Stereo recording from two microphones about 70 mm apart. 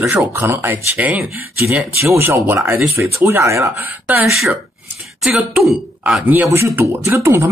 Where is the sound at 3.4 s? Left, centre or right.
Right.